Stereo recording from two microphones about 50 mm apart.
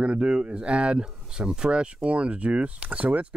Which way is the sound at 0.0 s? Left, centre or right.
Centre.